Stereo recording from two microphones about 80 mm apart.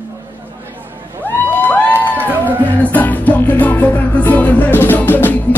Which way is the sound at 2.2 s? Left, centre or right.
Right.